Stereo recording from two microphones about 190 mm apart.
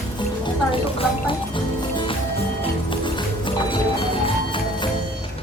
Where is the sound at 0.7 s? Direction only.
30° left (ahead or behind).